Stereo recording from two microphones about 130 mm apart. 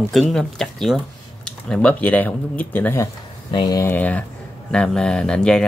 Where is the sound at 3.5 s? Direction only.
30° left (ahead or behind).